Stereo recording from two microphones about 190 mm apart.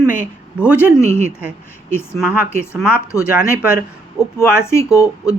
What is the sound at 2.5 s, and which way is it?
Speech, 15° left (ahead or behind).